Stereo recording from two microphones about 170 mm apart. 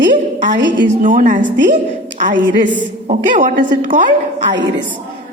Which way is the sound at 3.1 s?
50° right (ahead or behind).